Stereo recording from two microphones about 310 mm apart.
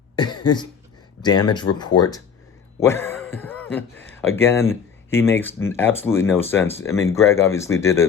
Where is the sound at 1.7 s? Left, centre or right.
Left.